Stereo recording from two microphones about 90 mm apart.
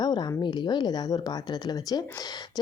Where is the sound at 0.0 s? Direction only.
55° left (ahead or behind).